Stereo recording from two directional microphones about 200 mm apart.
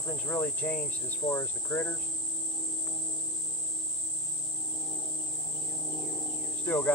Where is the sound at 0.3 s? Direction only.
10° left (ahead or behind).